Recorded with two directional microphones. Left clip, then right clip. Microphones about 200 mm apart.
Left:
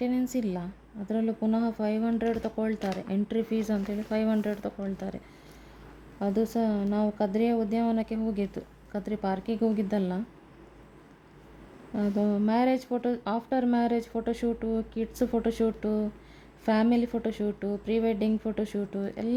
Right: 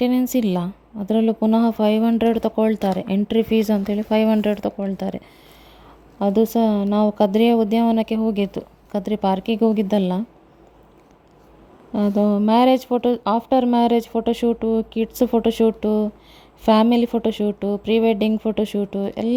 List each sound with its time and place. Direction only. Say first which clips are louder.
0.0 s speech: right 10 dB; 40° right (ahead or behind)
11.9 s speech: right 9 dB; 30° right (ahead or behind)